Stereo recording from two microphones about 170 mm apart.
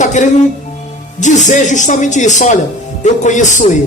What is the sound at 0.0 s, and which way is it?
Speech, 45° left (ahead or behind).